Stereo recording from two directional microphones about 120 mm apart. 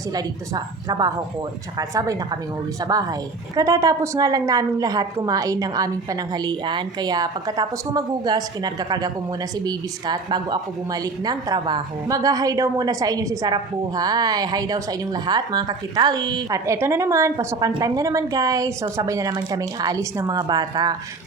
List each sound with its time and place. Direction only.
0.1 s a woman's voice: 35° right (ahead or behind)